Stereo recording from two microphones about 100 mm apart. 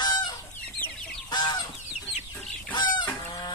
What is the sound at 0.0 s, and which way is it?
Chicken, 45° left (ahead or behind).